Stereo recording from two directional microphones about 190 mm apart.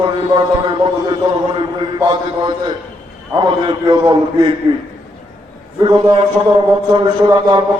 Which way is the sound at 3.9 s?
20° right (ahead or behind).